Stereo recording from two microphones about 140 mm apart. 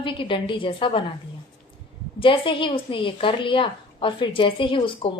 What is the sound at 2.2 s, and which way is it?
A woman's voice, 40° left (ahead or behind).